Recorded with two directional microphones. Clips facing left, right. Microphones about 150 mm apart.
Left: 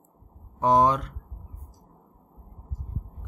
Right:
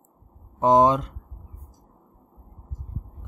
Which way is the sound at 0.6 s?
20° right (ahead or behind).